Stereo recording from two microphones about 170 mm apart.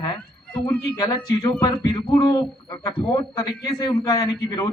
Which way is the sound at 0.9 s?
30° left (ahead or behind).